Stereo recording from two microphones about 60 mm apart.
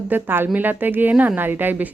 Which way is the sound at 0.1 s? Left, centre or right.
Right.